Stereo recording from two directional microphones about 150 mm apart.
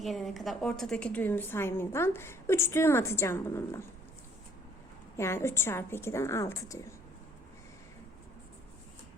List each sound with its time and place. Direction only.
0.0 s a woman's voice: centre (ahead or behind); by 3.8 s 15° left (ahead or behind)
5.1 s a woman's voice: 15° left (ahead or behind)